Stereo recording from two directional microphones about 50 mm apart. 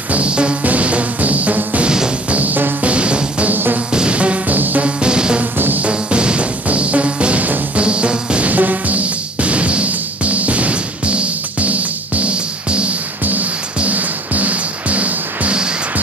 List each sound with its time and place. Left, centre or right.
0.1 s music: right
2.9 s music: right
3.5 s music: right
3.9 s music: right
5.4 s music: right
5.9 s music: right
8.5 s music: right
13.2 s music: right